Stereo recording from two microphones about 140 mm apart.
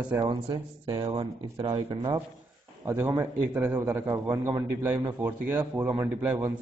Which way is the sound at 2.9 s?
20° right (ahead or behind).